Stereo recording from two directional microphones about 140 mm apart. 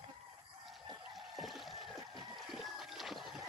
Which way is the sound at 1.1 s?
Centre (ahead or behind).